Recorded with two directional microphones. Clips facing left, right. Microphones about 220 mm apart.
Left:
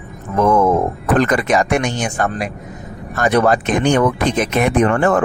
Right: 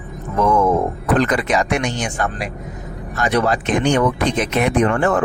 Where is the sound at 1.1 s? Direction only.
50° left (ahead or behind).